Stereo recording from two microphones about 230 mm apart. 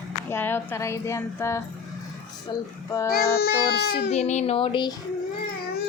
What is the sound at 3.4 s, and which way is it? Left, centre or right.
Child singing, left.